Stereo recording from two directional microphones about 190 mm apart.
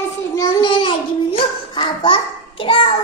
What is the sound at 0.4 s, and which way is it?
Child singing, 25° left (ahead or behind).